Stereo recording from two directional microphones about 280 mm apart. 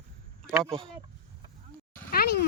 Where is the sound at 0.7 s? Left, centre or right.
Centre.